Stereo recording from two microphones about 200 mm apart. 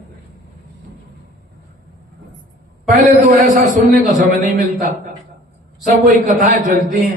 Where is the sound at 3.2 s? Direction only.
40° right (ahead or behind).